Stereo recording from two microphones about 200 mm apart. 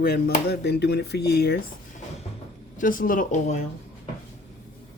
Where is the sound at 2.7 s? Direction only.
45° left (ahead or behind).